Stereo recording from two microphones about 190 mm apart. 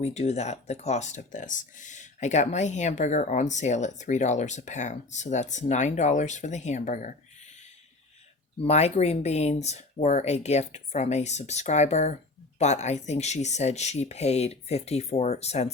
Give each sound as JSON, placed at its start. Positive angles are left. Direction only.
{"t": 0.0, "sound": "speech", "side_deg": 35}
{"t": 8.5, "sound": "speech", "side_deg": 35}